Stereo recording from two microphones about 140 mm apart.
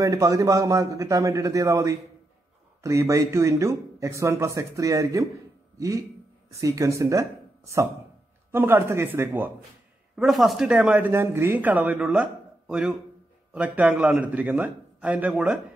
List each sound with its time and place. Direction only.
0.0 s speech: 25° right (ahead or behind)
10.1 s speech: centre (ahead or behind)